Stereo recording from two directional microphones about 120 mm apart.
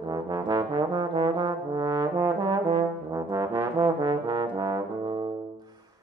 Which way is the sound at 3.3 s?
25° right (ahead or behind).